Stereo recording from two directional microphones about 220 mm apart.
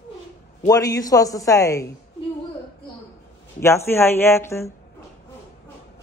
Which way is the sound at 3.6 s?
10° left (ahead or behind).